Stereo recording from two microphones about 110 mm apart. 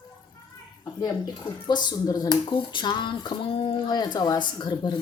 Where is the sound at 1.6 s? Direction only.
40° left (ahead or behind).